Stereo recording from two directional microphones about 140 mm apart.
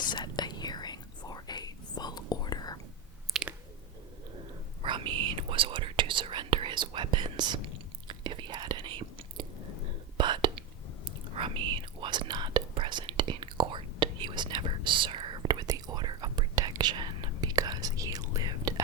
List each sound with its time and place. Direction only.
0.1 s whispering: 30° left (ahead or behind)
3.3 s chewing: centre (ahead or behind)
4.8 s whispering: 35° right (ahead or behind)
8.0 s chewing: 35° right (ahead or behind)
10.2 s whispering: 35° right (ahead or behind)